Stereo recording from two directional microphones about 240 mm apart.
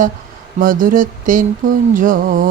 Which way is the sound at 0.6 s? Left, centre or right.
Right.